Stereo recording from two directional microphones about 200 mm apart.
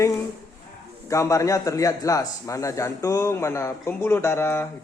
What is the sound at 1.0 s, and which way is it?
A man's voice, 15° left (ahead or behind).